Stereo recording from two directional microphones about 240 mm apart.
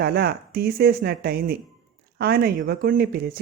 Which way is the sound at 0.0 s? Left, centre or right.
Right.